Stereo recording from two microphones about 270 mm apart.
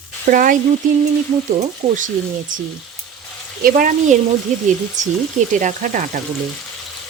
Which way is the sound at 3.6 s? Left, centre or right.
Right.